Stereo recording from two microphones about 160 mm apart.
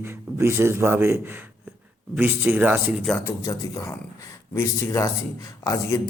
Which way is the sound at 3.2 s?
20° left (ahead or behind).